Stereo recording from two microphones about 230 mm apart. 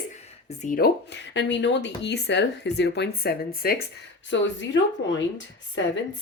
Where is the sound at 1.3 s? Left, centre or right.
Left.